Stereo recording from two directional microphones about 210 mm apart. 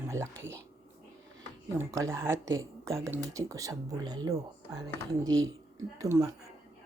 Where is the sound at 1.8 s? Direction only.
15° right (ahead or behind).